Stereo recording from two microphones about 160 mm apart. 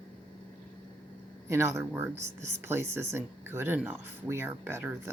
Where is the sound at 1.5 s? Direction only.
15° right (ahead or behind).